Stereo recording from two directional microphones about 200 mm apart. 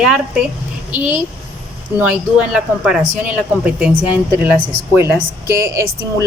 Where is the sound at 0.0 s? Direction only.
5° right (ahead or behind).